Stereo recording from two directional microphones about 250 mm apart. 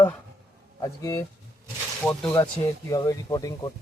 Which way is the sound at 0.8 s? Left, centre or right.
Centre.